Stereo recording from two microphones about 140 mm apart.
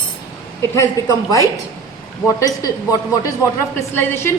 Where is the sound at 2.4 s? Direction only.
25° left (ahead or behind).